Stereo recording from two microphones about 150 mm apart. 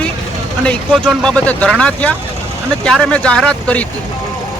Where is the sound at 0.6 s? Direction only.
5° left (ahead or behind).